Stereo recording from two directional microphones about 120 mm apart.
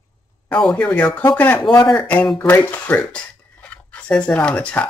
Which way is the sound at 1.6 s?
Centre (ahead or behind).